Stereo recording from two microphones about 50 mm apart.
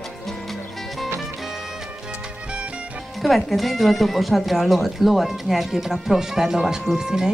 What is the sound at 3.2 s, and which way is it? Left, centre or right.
Speech, centre.